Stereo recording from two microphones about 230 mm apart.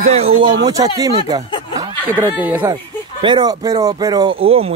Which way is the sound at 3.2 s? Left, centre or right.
Centre.